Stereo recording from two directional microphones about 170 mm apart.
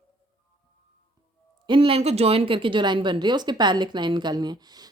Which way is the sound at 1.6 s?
30° right (ahead or behind).